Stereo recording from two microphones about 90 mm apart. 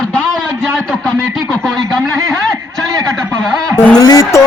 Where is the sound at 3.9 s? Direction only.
45° left (ahead or behind).